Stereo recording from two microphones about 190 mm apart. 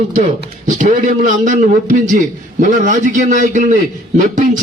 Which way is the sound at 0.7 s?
40° right (ahead or behind).